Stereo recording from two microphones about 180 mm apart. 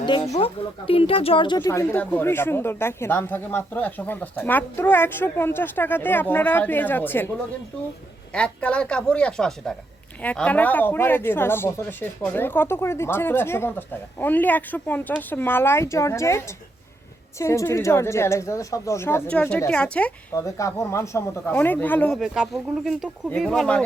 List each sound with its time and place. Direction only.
0.0 s speech: 25° left (ahead or behind)
1.5 s speech: 15° left (ahead or behind)
8.3 s speech: 5° left (ahead or behind)
20.3 s speech: 15° left (ahead or behind)
22.2 s speech: centre (ahead or behind)